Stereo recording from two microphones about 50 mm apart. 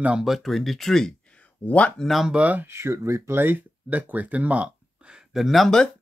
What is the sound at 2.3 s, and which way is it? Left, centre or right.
Speech, right.